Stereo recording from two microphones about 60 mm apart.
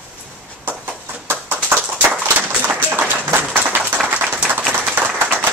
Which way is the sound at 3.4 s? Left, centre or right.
Right.